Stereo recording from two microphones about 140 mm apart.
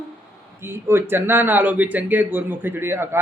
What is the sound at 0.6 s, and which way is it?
Speech, 15° right (ahead or behind).